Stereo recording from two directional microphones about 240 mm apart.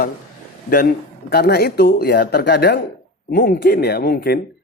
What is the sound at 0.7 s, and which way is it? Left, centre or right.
A man's voice, left.